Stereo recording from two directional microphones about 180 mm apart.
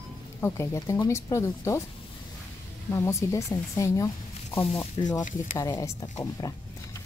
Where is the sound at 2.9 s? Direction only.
15° left (ahead or behind).